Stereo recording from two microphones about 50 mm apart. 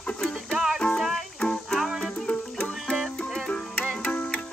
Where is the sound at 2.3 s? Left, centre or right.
Left.